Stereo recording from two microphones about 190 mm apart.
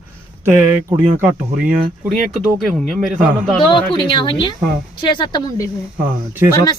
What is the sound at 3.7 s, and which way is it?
A woman's voice, 25° left (ahead or behind).